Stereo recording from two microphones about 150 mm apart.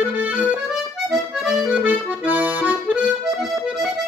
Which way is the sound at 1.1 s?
5° right (ahead or behind).